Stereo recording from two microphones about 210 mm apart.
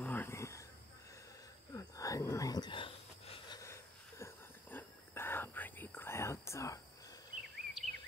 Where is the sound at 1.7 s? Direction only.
15° left (ahead or behind).